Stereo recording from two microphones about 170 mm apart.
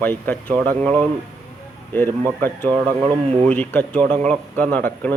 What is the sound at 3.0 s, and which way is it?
Speech, 30° right (ahead or behind).